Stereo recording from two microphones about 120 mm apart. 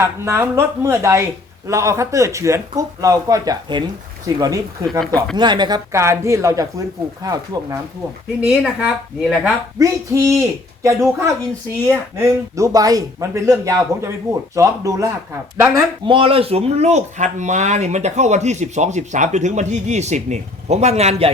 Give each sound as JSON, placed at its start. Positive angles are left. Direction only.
{"t": 0.0, "sound": "speech", "side_deg": -20}
{"t": 4.9, "sound": "speech", "side_deg": 5}
{"t": 5.4, "sound": "speech", "side_deg": -40}
{"t": 5.9, "sound": "speech", "side_deg": -25}
{"t": 8.4, "sound": "speech", "side_deg": 0}
{"t": 9.7, "sound": "speech", "side_deg": -25}
{"t": 11.9, "sound": "speech", "side_deg": -25}
{"t": 16.0, "sound": "speech", "side_deg": -50}